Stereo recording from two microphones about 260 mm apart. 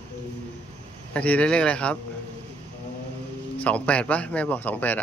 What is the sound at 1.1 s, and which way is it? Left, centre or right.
Speech, centre.